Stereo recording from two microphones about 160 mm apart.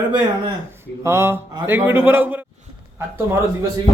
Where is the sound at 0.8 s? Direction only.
15° right (ahead or behind).